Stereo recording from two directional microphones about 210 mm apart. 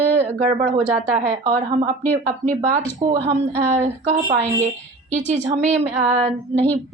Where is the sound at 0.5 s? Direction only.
35° right (ahead or behind).